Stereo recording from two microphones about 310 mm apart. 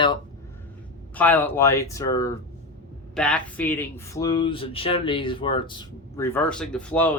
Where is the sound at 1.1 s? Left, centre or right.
Centre.